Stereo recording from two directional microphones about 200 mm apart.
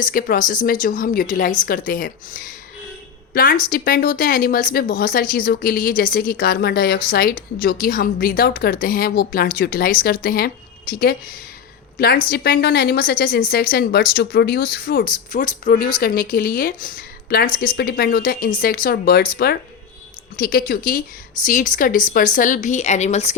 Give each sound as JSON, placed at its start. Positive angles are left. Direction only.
{"t": 0.0, "sound": "a woman's voice", "side_deg": 45}